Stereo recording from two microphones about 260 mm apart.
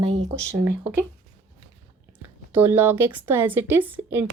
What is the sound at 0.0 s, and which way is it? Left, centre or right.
Speech, right.